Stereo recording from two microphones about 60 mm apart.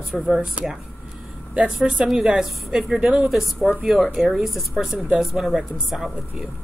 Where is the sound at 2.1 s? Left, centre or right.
Centre.